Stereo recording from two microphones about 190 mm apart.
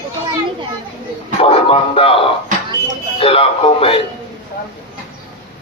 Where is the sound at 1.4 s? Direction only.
30° left (ahead or behind).